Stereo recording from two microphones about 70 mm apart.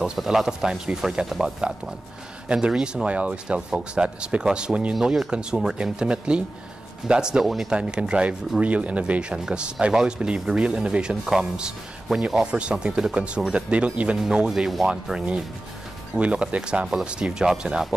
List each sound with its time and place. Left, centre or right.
0.0 s speech: centre
4.9 s speech: centre